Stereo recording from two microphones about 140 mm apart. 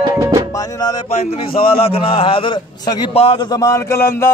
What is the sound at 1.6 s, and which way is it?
Speech, 40° left (ahead or behind).